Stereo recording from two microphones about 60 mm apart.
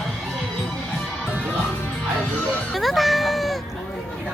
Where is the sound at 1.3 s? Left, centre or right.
Left.